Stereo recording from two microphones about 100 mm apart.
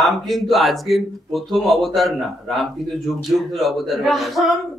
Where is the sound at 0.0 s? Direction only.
Centre (ahead or behind).